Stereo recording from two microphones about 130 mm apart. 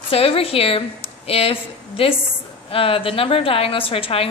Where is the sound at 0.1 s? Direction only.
50° left (ahead or behind).